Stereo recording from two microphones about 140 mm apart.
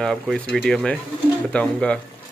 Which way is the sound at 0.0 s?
5° left (ahead or behind).